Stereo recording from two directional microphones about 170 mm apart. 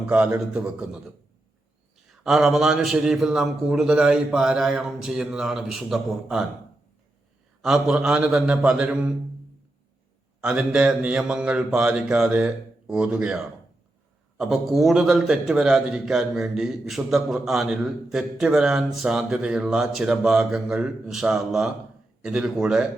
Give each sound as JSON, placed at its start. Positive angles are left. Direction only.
{"t": 0.0, "sound": "a man's voice", "side_deg": -5}
{"t": 2.0, "sound": "a man's voice", "side_deg": 0}
{"t": 7.6, "sound": "a man's voice", "side_deg": -5}
{"t": 10.4, "sound": "a man's voice", "side_deg": -5}